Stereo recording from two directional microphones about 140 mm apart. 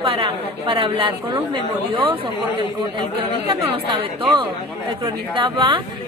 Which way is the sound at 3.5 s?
40° right (ahead or behind).